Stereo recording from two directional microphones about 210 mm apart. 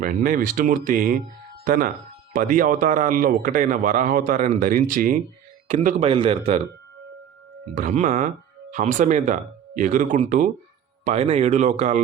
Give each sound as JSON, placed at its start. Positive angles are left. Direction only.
{"t": 0.0, "sound": "speech", "side_deg": -40}
{"t": 7.8, "sound": "speech", "side_deg": -35}